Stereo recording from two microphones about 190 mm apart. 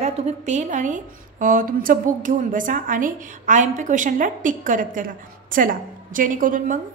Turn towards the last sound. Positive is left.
turn(degrees=-45)  # may be behind; listen again after turning